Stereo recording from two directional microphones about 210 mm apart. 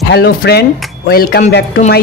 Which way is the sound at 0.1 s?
50° left (ahead or behind).